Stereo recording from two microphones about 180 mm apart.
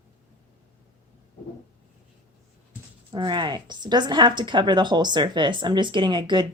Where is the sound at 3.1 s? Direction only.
25° right (ahead or behind).